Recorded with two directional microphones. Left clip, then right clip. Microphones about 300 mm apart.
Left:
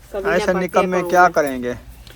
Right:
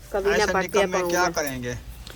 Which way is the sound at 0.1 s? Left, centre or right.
Centre.